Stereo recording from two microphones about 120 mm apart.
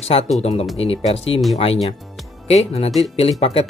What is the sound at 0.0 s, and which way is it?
Speech, 55° left (ahead or behind).